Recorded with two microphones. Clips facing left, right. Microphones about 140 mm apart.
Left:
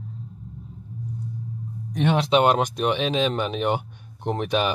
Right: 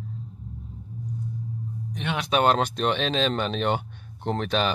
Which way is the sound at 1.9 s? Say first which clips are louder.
Left 8 dB; 40° left (ahead or behind).